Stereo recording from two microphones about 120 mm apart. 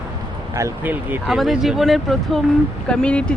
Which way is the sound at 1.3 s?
Centre (ahead or behind).